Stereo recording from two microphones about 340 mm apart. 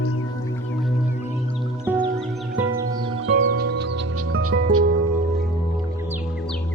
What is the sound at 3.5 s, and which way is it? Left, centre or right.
Music, right.